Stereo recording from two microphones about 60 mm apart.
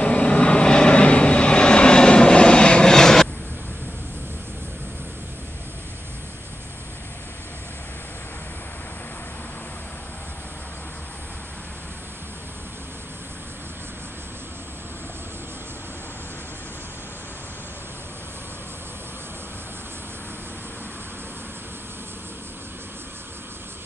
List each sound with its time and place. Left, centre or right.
0.0 s vehicle: left